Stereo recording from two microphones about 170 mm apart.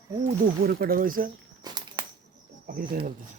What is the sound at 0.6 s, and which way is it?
Speech, 60° right (ahead or behind).